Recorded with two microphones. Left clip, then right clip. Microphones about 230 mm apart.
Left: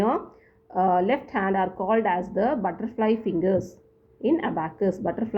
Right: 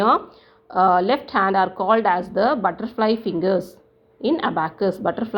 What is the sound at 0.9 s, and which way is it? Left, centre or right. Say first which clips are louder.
Speech: right 5 dB; right.